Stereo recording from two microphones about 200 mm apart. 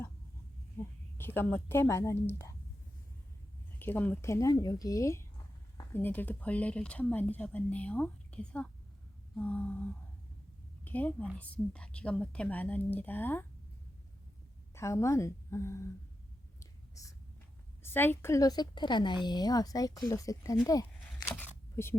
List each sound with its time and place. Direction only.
0.8 s a sound: 15° left (ahead or behind)
1.2 s a woman's voice: 10° left (ahead or behind)
3.8 s speech: 10° left (ahead or behind)
9.3 s a sound: 5° left (ahead or behind)
10.8 s a woman's voice: 10° left (ahead or behind)
14.8 s speech: 15° left (ahead or behind)
16.6 s whispering: 15° left (ahead or behind)
17.8 s a woman's voice: 10° left (ahead or behind)
21.4 s a sound: 10° left (ahead or behind)